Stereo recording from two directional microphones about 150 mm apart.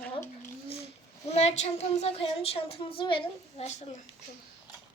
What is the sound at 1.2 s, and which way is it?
Speech, 45° left (ahead or behind).